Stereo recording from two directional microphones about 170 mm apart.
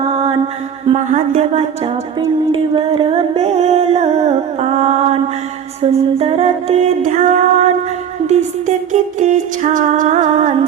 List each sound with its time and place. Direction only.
0.0 s mantra: 30° right (ahead or behind)
0.9 s music: 45° right (ahead or behind)
2.5 s a sound: 30° right (ahead or behind); by 7.7 s 45° right (ahead or behind)
8.3 s music: 45° right (ahead or behind)